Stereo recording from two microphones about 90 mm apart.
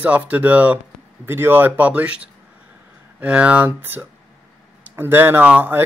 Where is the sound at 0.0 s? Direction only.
15° right (ahead or behind).